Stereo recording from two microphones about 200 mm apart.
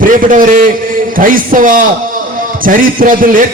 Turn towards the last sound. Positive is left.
turn(degrees=-45)  # may be behind; listen again after turning